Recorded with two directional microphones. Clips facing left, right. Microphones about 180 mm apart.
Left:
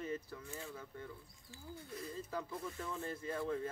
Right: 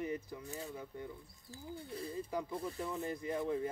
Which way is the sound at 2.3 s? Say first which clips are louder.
Right 3 dB; 15° right (ahead or behind).